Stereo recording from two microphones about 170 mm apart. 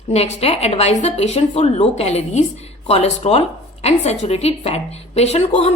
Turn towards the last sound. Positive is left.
turn(degrees=40)  # may be behind; listen again after turning